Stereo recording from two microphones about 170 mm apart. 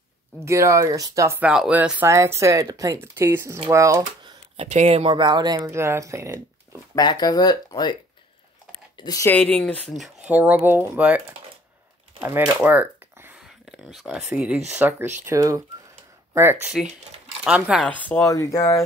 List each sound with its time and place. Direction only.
0.5 s speech: 15° right (ahead or behind)
4.6 s speech: 40° right (ahead or behind); by 6.4 s 15° right (ahead or behind)
7.0 s speech: 25° left (ahead or behind)
8.9 s speech: 20° left (ahead or behind)
9.9 s speech: 5° right (ahead or behind)
17.8 s speech: 10° left (ahead or behind)